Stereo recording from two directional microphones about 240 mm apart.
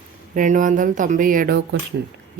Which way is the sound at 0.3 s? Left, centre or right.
Right.